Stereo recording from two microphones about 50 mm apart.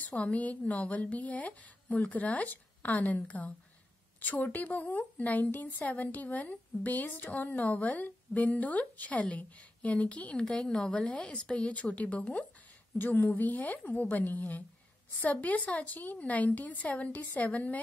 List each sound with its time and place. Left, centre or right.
0.0 s a woman's voice: left
12.9 s a woman's voice: left
13.4 s a woman's voice: left